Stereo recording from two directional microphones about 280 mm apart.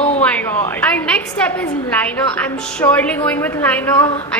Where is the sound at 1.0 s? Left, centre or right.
Centre.